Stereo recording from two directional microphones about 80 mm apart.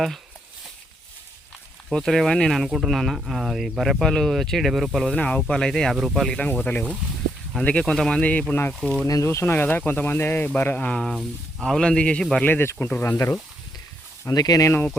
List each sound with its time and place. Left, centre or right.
1.9 s speech: centre
5.1 s speech: centre
6.4 s speech: centre
8.8 s speech: centre
9.0 s speech: left; by 11.0 s centre
11.0 s speech: centre
11.6 s speech: centre
12.5 s speech: left
14.3 s speech: left